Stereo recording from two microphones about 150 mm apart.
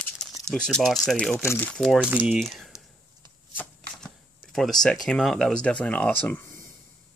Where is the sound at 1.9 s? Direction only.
10° right (ahead or behind).